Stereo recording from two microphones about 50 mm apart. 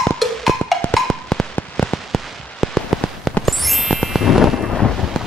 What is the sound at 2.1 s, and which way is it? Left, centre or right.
Fireworks, centre.